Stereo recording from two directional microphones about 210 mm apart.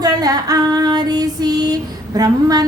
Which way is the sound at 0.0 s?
15° right (ahead or behind).